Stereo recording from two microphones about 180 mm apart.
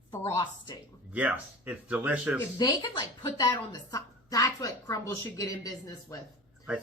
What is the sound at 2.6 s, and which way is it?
A woman's voice, 25° left (ahead or behind).